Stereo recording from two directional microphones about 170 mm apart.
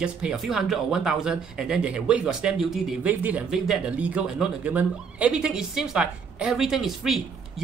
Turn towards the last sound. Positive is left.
turn(degrees=0)  # may be behind; listen again after turning